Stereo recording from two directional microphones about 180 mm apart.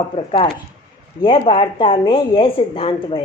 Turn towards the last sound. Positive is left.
turn(degrees=30)  # may be behind; listen again after turning